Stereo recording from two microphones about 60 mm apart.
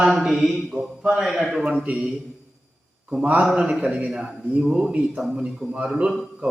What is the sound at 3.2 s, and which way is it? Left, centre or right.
Speech, right.